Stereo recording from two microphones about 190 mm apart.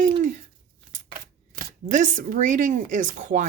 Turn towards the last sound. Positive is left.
turn(degrees=-40)  # may be behind; listen again after turning